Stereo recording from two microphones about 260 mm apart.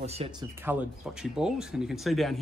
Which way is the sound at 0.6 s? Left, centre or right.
Centre.